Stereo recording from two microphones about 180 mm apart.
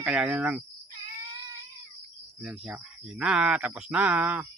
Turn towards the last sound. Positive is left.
turn(degrees=-10)  # may be behind; listen again after turning